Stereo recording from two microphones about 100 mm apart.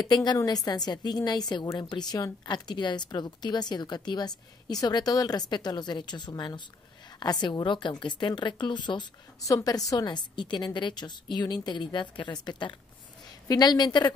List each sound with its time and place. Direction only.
0.0 s a woman's voice: 45° left (ahead or behind)
9.4 s speech: 35° left (ahead or behind)